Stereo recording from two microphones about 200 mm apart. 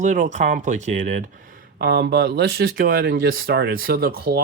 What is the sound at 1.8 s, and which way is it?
Speech, 50° right (ahead or behind).